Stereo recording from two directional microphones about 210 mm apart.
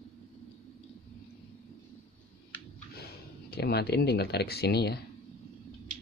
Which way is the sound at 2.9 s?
50° left (ahead or behind).